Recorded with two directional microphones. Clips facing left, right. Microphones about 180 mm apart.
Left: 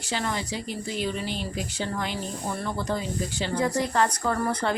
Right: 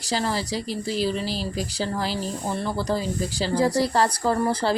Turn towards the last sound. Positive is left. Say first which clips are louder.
# right 4 dB
turn(degrees=-30)  # may be behind; listen again after turning